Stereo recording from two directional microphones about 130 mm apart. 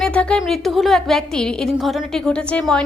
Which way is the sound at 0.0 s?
10° left (ahead or behind).